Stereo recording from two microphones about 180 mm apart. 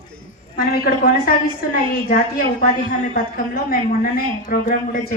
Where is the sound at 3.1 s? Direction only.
50° left (ahead or behind).